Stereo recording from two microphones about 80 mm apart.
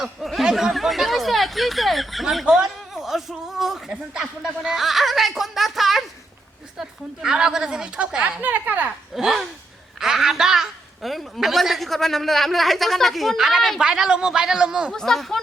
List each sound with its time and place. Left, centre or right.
0.0 s speech: centre
8.4 s speech: right
9.1 s speech: centre
14.9 s speech: centre